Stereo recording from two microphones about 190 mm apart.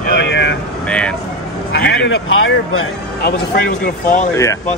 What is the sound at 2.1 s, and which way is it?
Speech, 90° left.